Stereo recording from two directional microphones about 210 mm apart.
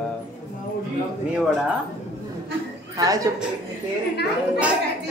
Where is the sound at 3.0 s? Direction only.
15° right (ahead or behind).